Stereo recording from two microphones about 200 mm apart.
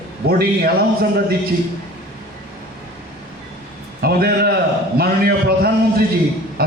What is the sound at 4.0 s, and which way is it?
A man's voice, 50° right (ahead or behind).